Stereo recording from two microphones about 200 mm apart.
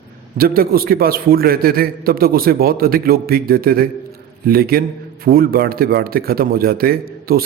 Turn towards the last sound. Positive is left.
turn(degrees=-45)  # may be behind; listen again after turning